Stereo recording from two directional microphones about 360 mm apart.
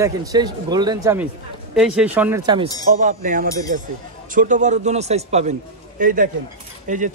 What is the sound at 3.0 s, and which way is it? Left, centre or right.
A man's voice, right.